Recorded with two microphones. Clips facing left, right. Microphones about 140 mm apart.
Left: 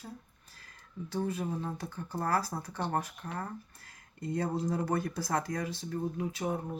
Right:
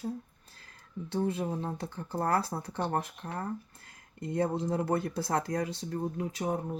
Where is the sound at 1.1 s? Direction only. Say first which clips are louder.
Right 3 dB; 30° right (ahead or behind).